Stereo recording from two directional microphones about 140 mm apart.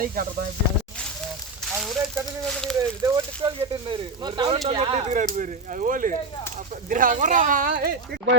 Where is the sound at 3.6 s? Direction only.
35° right (ahead or behind); by 7.9 s 90° right.